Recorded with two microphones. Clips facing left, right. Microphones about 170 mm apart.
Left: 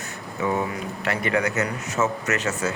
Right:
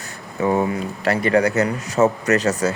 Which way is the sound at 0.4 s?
35° right (ahead or behind).